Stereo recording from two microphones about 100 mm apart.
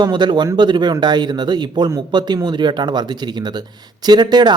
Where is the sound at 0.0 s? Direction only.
50° right (ahead or behind).